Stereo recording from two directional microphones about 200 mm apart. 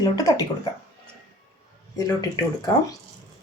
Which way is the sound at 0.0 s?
15° left (ahead or behind).